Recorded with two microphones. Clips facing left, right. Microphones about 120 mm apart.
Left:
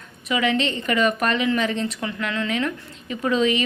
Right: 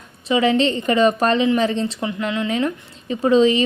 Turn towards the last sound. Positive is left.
turn(degrees=-30)  # may be behind; listen again after turning